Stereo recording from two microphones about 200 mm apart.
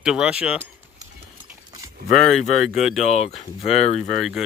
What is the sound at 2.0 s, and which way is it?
Speech, 45° left (ahead or behind).